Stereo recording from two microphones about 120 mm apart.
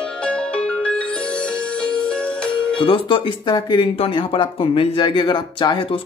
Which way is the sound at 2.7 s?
45° left (ahead or behind).